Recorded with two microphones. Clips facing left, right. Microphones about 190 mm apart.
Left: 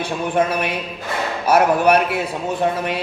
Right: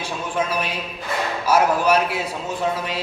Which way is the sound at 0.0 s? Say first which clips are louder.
Left 6 dB; 60° left (ahead or behind).